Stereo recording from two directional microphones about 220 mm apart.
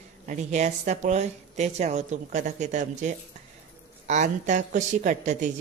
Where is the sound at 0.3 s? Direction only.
30° right (ahead or behind).